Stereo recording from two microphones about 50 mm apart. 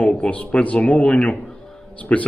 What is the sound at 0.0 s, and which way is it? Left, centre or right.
Speech, left.